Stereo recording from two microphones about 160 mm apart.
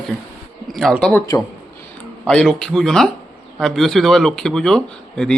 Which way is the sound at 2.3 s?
5° left (ahead or behind).